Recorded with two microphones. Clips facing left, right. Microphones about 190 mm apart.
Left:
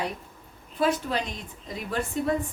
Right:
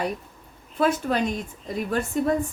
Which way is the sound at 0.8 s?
50° right (ahead or behind).